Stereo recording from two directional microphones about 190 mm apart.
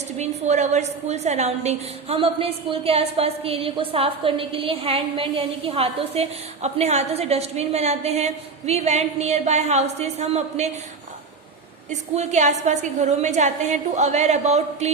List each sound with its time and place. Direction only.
0.2 s a woman's voice: 35° right (ahead or behind)
11.9 s a woman's voice: 35° right (ahead or behind)